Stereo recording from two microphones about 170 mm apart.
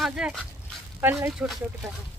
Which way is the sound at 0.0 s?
5° right (ahead or behind).